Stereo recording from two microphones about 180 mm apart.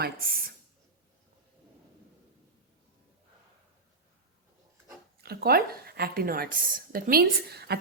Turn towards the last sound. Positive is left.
turn(degrees=-65)  # may be behind; listen again after turning